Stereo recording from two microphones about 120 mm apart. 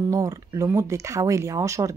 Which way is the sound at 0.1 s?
30° right (ahead or behind).